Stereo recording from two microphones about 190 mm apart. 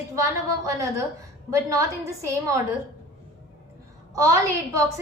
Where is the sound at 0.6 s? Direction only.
15° right (ahead or behind).